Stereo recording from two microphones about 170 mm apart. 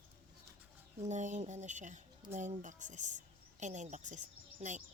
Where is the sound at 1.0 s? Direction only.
45° right (ahead or behind).